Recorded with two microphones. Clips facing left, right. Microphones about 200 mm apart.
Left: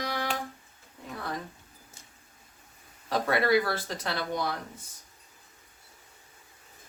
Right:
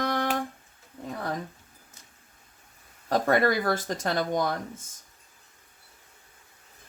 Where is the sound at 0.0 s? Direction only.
50° right (ahead or behind).